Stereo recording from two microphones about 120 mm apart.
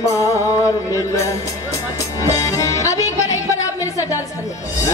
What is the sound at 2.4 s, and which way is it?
Music, 30° left (ahead or behind).